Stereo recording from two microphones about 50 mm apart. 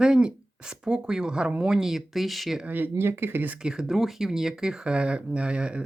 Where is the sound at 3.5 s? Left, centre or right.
Centre.